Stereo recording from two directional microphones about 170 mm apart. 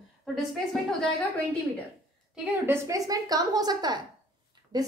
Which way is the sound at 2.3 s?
15° right (ahead or behind).